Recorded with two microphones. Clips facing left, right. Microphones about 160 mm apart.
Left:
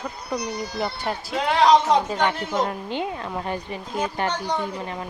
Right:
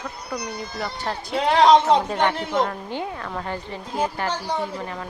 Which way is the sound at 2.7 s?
20° left (ahead or behind).